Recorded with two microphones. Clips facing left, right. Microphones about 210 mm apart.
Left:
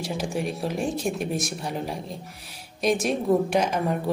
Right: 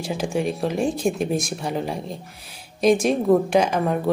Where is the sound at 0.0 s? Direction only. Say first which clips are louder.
Right 4 dB; centre (ahead or behind).